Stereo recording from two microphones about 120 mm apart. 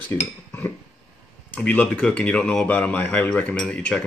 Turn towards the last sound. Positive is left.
turn(degrees=10)  # may be behind; listen again after turning